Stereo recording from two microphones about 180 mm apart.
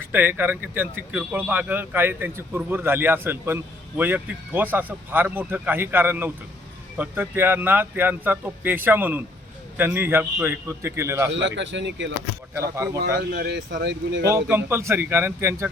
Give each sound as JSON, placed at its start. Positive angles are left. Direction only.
{"t": 0.0, "sound": "speech", "side_deg": -10}
{"t": 11.3, "sound": "speech", "side_deg": -90}
{"t": 12.5, "sound": "speech", "side_deg": -15}
{"t": 13.1, "sound": "speech", "side_deg": -60}
{"t": 13.8, "sound": "speech", "side_deg": -80}
{"t": 14.4, "sound": "speech", "side_deg": -10}